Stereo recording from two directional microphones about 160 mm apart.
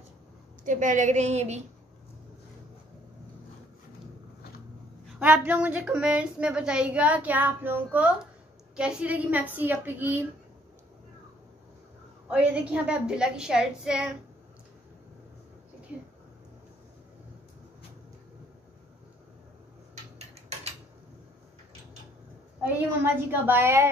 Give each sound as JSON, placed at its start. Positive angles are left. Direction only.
{"t": 0.7, "sound": "a woman's voice", "side_deg": -55}
{"t": 5.2, "sound": "a woman's voice", "side_deg": -10}
{"t": 12.3, "sound": "a woman's voice", "side_deg": -5}
{"t": 20.2, "sound": "a sound", "side_deg": -45}
{"t": 23.3, "sound": "a woman's voice", "side_deg": -15}